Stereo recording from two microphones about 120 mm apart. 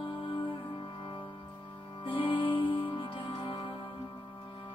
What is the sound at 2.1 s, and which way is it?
Music, 45° left (ahead or behind).